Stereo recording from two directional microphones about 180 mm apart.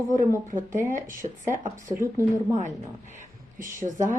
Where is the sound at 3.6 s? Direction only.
45° right (ahead or behind).